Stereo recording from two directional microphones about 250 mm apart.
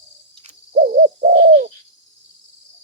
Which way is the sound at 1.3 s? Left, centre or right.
Right.